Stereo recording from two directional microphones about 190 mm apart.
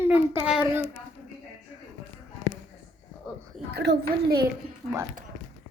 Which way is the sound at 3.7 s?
60° right (ahead or behind).